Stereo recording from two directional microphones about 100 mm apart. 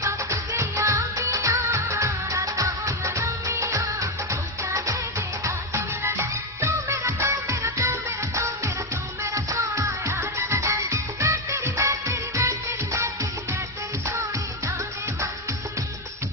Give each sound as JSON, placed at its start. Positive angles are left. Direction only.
{"t": 0.0, "sound": "music", "side_deg": -30}
{"t": 9.2, "sound": "music", "side_deg": -30}